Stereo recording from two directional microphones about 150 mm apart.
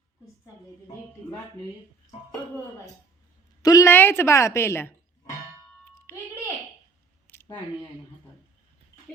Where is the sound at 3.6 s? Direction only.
25° left (ahead or behind).